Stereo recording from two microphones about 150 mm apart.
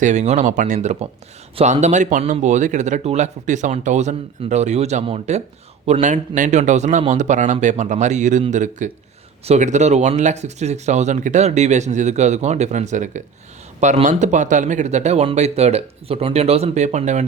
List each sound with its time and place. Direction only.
0.0 s speech: 50° right (ahead or behind)